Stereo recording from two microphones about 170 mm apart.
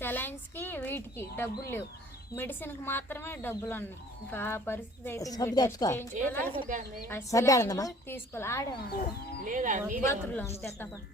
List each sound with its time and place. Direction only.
0.0 s speech: 10° left (ahead or behind)
6.7 s speech: 50° right (ahead or behind)
7.1 s a woman's voice: 20° left (ahead or behind)
8.9 s moo: 70° left (ahead or behind)
9.4 s speech: 50° right (ahead or behind)
10.0 s speech: 15° left (ahead or behind)